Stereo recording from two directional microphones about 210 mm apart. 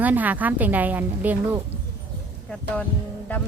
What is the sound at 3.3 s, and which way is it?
Music, 5° left (ahead or behind).